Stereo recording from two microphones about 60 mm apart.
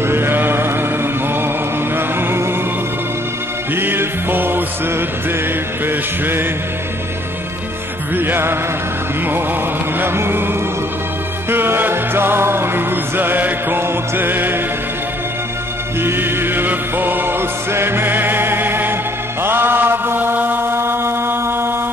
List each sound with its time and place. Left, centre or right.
0.0 s music: right
2.0 s music: right
3.7 s music: right
5.9 s music: right
8.2 s music: right
9.9 s music: right
11.5 s music: right
16.0 s music: right
19.4 s chant: right